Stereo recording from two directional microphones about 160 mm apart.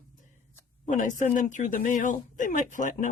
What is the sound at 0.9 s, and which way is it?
Speech, 55° left (ahead or behind).